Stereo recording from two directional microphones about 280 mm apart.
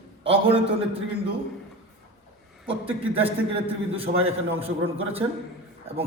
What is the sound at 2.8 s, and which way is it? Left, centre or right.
A man's voice, centre.